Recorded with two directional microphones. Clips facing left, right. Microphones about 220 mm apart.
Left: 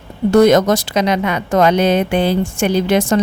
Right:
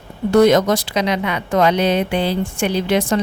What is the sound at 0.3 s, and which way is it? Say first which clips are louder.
Speech: left 2 dB; 45° left (ahead or behind).